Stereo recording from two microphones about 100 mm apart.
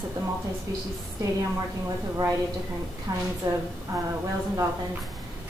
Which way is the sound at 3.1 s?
40° right (ahead or behind).